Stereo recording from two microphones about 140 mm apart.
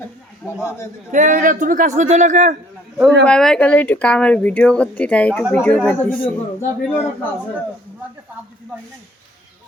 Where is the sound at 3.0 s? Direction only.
5° left (ahead or behind).